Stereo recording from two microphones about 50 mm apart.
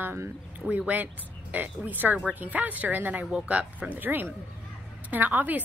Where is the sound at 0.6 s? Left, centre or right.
Centre.